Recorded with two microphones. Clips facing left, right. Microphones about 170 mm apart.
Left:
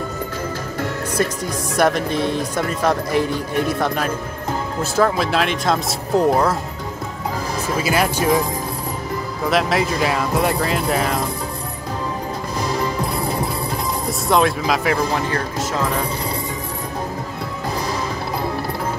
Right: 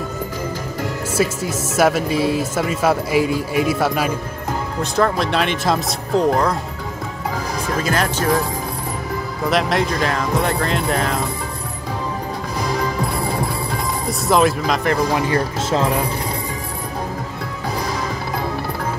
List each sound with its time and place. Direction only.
0.7 s speech: 5° right (ahead or behind)
4.9 s speech: 5° left (ahead or behind)
7.6 s speech: 5° left (ahead or behind)
13.0 s music: centre (ahead or behind)
15.3 s speech: 25° right (ahead or behind)